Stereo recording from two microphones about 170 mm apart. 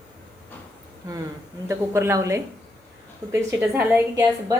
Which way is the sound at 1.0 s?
20° right (ahead or behind).